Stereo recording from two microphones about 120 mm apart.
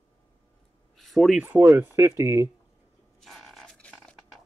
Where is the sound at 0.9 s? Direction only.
Centre (ahead or behind).